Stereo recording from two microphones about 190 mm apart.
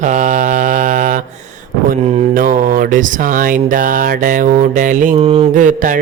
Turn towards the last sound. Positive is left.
turn(degrees=-45)  # may be behind; listen again after turning